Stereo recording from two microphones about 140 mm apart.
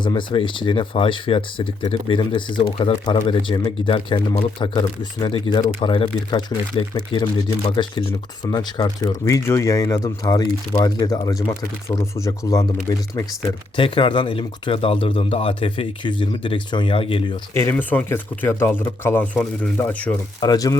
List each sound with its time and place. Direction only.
0.0 s speech: 35° left (ahead or behind)
8.4 s speech: 25° left (ahead or behind)
13.7 s speech: 35° left (ahead or behind)
17.5 s speech: 15° left (ahead or behind)
20.4 s speech: 25° left (ahead or behind)